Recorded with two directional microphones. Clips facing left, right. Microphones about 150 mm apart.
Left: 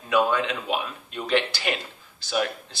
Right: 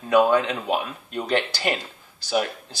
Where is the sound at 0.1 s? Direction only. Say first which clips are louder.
Right 4 dB; 40° right (ahead or behind).